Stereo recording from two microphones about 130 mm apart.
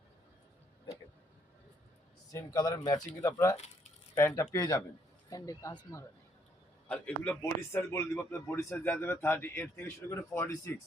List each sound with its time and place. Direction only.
2.3 s speech: 25° left (ahead or behind)
6.8 s a man's voice: 10° left (ahead or behind)